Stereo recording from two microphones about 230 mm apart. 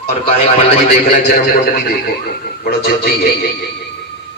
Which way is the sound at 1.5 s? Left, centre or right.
Left.